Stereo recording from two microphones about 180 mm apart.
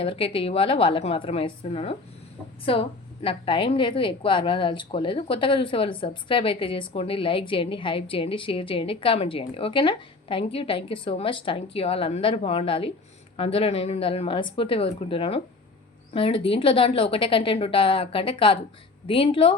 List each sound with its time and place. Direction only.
0.0 s a woman's voice: 30° left (ahead or behind)